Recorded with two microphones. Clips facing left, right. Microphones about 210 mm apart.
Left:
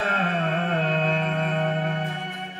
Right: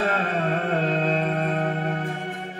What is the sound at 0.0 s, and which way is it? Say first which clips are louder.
Music: right 2 dB; 40° right (ahead or behind).